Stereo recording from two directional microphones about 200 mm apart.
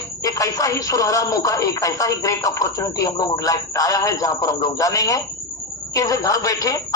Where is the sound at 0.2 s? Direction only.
15° left (ahead or behind).